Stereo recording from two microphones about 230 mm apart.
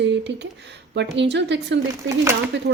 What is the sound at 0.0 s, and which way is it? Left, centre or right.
Speech, right.